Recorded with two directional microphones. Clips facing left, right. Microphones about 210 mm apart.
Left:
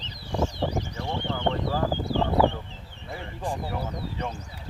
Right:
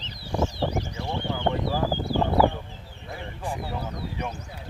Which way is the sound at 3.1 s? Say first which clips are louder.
Left 1 dB; 5° right (ahead or behind).